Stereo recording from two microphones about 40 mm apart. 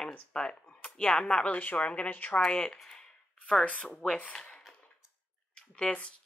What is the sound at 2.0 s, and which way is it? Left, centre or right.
Speech, left.